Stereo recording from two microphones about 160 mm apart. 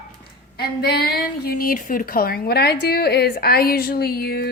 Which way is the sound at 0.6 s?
85° left.